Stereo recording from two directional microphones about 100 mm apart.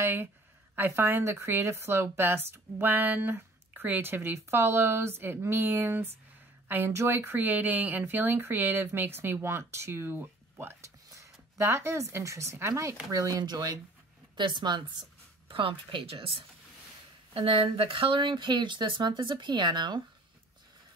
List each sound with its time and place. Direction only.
0.0 s a woman's voice: 20° right (ahead or behind); by 16.3 s 65° right (ahead or behind)
17.3 s speech: 60° right (ahead or behind)